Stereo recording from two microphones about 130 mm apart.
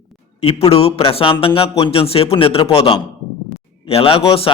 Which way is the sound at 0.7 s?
50° left (ahead or behind).